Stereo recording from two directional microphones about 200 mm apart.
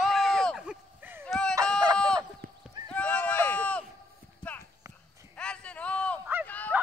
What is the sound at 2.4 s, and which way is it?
Horse, 50° right (ahead or behind).